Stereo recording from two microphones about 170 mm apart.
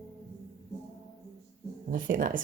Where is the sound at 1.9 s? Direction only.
55° right (ahead or behind).